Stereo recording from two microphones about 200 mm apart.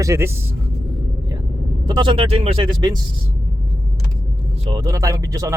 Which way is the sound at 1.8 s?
20° right (ahead or behind).